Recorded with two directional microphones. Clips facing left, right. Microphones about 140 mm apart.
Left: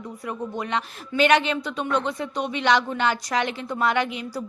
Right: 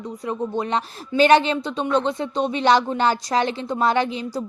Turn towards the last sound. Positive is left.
turn(degrees=-30)  # may be behind; listen again after turning